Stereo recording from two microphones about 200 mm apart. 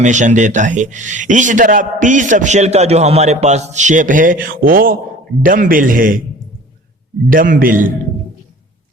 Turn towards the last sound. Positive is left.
turn(degrees=-45)  # may be behind; listen again after turning